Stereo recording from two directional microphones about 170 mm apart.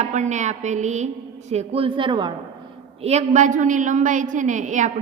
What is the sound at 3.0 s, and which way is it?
A woman's voice, 40° right (ahead or behind).